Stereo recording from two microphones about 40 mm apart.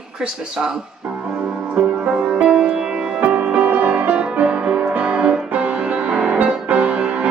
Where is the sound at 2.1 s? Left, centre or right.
Right.